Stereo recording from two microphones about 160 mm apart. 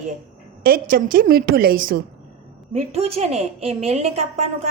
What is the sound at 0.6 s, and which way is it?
A woman's voice, 65° right (ahead or behind).